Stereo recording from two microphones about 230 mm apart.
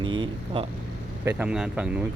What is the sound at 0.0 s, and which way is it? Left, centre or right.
Vehicle, right.